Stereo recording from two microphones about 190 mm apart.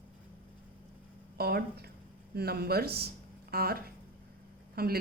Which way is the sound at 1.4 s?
55° right (ahead or behind).